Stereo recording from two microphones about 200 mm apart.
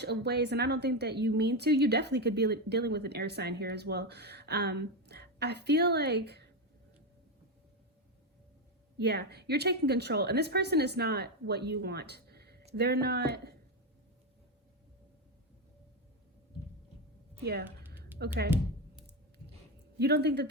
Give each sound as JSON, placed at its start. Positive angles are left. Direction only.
{"t": 0.0, "sound": "a woman's voice", "side_deg": -55}
{"t": 9.0, "sound": "a woman's voice", "side_deg": -55}
{"t": 17.4, "sound": "a woman's voice", "side_deg": -55}
{"t": 20.0, "sound": "a woman's voice", "side_deg": -55}